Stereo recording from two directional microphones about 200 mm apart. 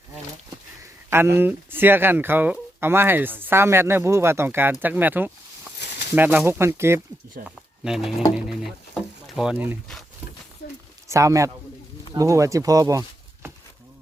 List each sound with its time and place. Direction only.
1.1 s speech: 10° right (ahead or behind)
7.4 s speech: centre (ahead or behind)
8.4 s a sound: centre (ahead or behind)
11.1 s speech: 15° right (ahead or behind)